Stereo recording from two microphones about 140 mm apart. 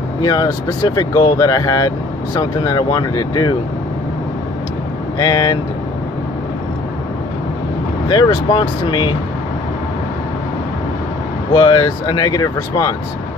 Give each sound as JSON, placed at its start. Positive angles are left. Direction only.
{"t": 0.2, "sound": "speech", "side_deg": 30}
{"t": 5.2, "sound": "speech", "side_deg": 30}
{"t": 8.1, "sound": "speech", "side_deg": 35}
{"t": 11.5, "sound": "speech", "side_deg": 30}